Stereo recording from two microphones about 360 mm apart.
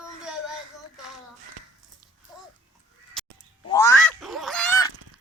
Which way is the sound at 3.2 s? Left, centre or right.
Centre.